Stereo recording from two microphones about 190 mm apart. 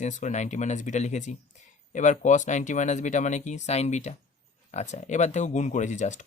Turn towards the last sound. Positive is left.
turn(degrees=40)  # may be behind; listen again after turning